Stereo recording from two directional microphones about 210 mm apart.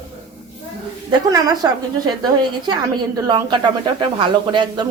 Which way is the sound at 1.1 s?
20° right (ahead or behind).